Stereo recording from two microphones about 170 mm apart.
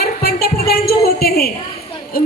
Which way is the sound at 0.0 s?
65° left (ahead or behind).